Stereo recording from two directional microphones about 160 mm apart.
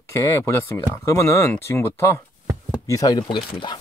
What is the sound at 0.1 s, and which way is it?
Speech, 15° left (ahead or behind).